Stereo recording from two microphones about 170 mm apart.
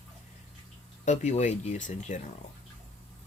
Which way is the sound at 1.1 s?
45° left (ahead or behind).